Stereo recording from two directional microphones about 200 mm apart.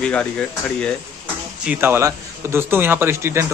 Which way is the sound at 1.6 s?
10° right (ahead or behind).